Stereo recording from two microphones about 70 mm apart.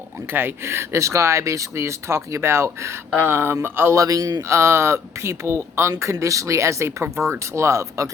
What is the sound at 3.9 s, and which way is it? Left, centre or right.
Speech, right.